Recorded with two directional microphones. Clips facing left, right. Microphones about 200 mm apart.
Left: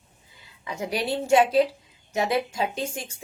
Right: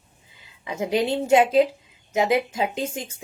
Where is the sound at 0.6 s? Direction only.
20° right (ahead or behind).